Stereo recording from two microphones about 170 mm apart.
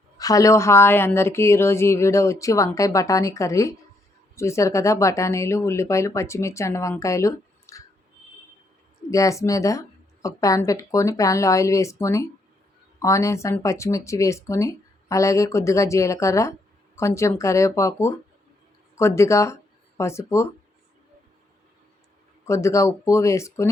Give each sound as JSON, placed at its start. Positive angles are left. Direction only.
{"t": 0.2, "sound": "speech", "side_deg": 20}
{"t": 9.0, "sound": "speech", "side_deg": 20}
{"t": 22.4, "sound": "speech", "side_deg": 15}